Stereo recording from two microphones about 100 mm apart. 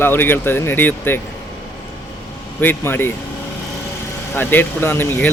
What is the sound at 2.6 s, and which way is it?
Speech, 20° left (ahead or behind).